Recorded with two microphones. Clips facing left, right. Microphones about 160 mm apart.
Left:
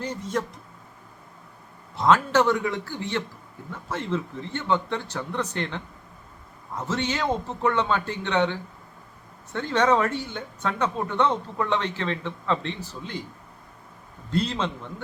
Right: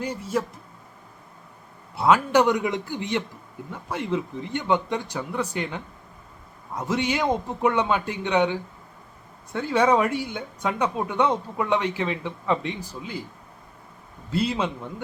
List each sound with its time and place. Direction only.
0.0 s speech: 10° right (ahead or behind)
2.0 s speech: 10° right (ahead or behind)
14.3 s speech: 10° right (ahead or behind)